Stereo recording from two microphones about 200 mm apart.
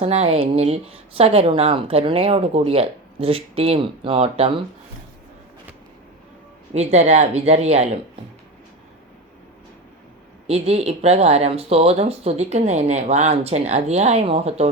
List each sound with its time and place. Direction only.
0.0 s speech: 30° right (ahead or behind)
6.7 s speech: 35° right (ahead or behind)
10.4 s speech: 30° right (ahead or behind)